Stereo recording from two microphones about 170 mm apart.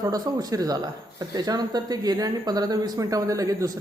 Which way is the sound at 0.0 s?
20° right (ahead or behind).